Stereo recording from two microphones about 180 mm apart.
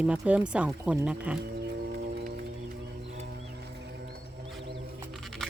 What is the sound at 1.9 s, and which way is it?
Music, 65° right (ahead or behind).